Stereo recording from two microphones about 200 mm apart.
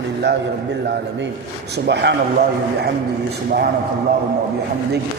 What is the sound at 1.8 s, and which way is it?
Speech, 60° right (ahead or behind).